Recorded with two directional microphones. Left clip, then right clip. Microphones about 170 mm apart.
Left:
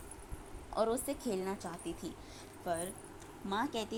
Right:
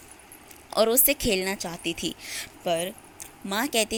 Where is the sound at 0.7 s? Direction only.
45° right (ahead or behind).